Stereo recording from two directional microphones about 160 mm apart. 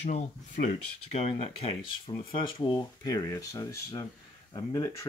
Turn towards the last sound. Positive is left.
turn(degrees=20)  # may be behind; listen again after turning